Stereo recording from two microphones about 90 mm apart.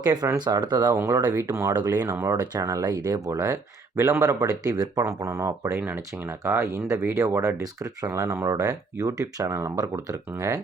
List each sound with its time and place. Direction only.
0.0 s speech: 50° right (ahead or behind)
2.6 s speech: 35° right (ahead or behind)